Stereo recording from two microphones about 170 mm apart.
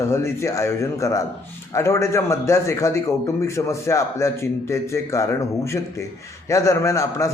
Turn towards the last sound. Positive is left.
turn(degrees=15)  # may be behind; listen again after turning